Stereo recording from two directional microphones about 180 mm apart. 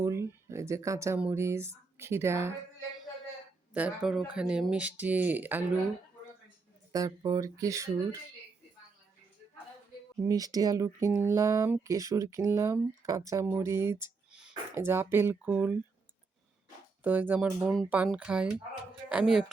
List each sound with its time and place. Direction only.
0.0 s speech: 15° right (ahead or behind)
3.8 s speech: 5° right (ahead or behind)
6.9 s speech: 20° right (ahead or behind)
10.2 s speech: 20° right (ahead or behind)
17.0 s speech: 10° right (ahead or behind)